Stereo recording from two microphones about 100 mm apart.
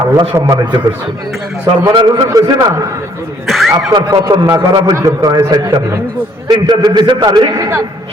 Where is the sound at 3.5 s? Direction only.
Centre (ahead or behind).